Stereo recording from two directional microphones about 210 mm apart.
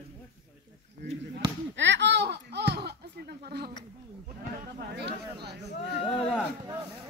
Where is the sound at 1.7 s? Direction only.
60° right (ahead or behind).